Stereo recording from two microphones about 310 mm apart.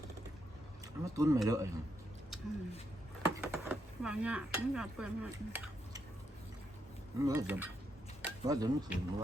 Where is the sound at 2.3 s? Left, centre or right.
Centre.